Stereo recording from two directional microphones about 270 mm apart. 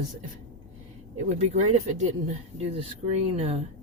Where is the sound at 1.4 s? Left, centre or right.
Right.